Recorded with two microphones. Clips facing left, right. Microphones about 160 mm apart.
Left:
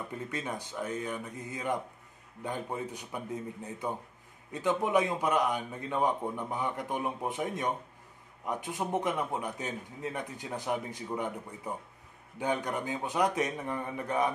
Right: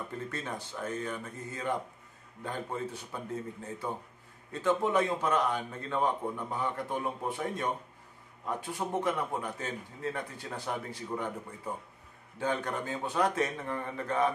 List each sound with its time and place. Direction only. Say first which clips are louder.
0.3 s a man's voice: left 2 dB; 15° left (ahead or behind)
4.5 s a man's voice: right 1 dB; 15° left (ahead or behind)